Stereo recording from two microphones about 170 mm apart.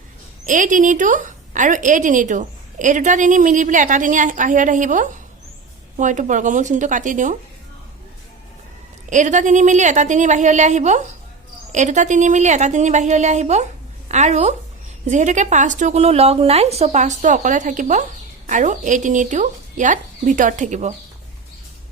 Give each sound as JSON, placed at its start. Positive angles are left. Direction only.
{"t": 0.4, "sound": "a woman's voice", "side_deg": -50}
{"t": 9.0, "sound": "a woman's voice", "side_deg": -45}